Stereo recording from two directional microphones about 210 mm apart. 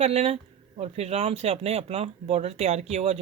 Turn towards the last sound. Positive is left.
turn(degrees=-30)  # may be behind; listen again after turning